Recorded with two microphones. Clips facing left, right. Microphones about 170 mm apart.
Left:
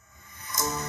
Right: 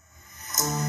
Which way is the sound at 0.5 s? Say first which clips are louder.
Right 1 dB; 40° right (ahead or behind).